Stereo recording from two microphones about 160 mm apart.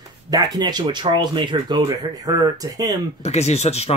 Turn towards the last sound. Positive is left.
turn(degrees=40)  # may be behind; listen again after turning